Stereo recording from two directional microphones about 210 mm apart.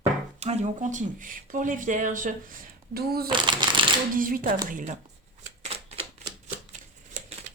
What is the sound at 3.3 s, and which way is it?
Speech, 20° right (ahead or behind).